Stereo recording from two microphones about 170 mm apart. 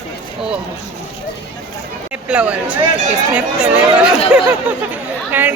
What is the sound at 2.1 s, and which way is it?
Speech, 5° right (ahead or behind).